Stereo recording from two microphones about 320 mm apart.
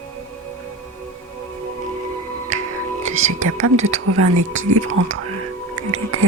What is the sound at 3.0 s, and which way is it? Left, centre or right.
Whispering, right.